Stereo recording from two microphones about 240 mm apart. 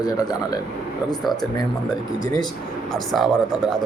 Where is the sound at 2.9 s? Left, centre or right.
Centre.